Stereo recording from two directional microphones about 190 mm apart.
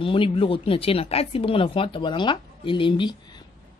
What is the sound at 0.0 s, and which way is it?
Speech, 25° left (ahead or behind).